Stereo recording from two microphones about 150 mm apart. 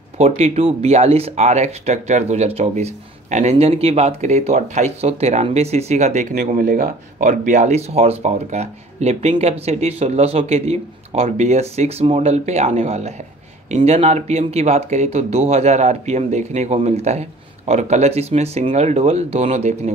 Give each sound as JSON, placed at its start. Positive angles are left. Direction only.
{"t": 0.2, "sound": "speech", "side_deg": -40}
{"t": 6.3, "sound": "speech", "side_deg": -65}